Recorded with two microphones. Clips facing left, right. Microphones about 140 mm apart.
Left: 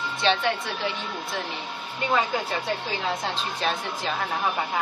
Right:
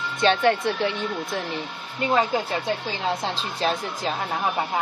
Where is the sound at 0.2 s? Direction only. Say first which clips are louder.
Right 5 dB; 45° right (ahead or behind).